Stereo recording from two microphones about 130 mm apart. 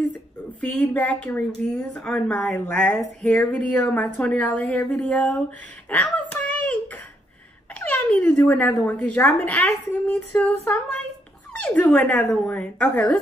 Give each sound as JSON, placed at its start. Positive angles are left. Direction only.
{"t": 0.6, "sound": "speech", "side_deg": 10}
{"t": 5.9, "sound": "a sound", "side_deg": 15}
{"t": 7.8, "sound": "speech", "side_deg": 10}
{"t": 10.4, "sound": "child singing", "side_deg": 20}
{"t": 11.5, "sound": "speech", "side_deg": 10}